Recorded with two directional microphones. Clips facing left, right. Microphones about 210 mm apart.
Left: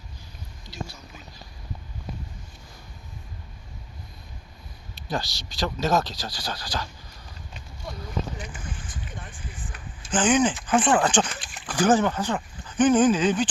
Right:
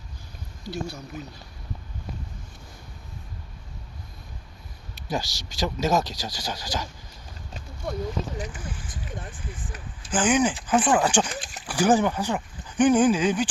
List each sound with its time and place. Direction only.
5.0 s a man's voice: 15° right (ahead or behind)
5.3 s speech: 45° right (ahead or behind)
5.5 s speech: 15° right (ahead or behind)
10.1 s speech: 10° right (ahead or behind)